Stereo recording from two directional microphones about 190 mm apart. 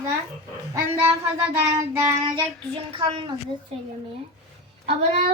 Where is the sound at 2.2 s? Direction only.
25° right (ahead or behind).